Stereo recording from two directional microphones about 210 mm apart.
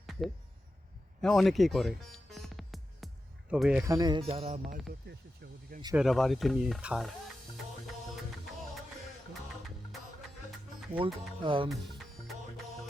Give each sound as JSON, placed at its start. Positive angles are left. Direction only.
{"t": 0.0, "sound": "a sound", "side_deg": 0}
{"t": 1.2, "sound": "speech", "side_deg": 0}
{"t": 2.3, "sound": "music", "side_deg": 0}
{"t": 3.5, "sound": "speech", "side_deg": 0}
{"t": 3.8, "sound": "speech", "side_deg": -15}
{"t": 4.9, "sound": "speech", "side_deg": -45}
{"t": 6.0, "sound": "speech", "side_deg": 0}
{"t": 10.9, "sound": "speech", "side_deg": -25}